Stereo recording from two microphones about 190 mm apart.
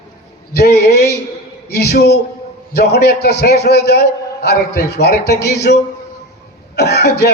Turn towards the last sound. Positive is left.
turn(degrees=60)  # may be behind; listen again after turning